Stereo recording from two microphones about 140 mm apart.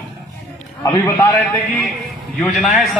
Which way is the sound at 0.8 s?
25° left (ahead or behind).